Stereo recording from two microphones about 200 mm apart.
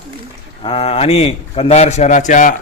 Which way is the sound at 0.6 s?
30° left (ahead or behind).